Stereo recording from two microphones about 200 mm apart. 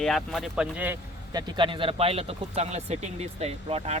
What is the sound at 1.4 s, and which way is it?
Speech, 25° right (ahead or behind).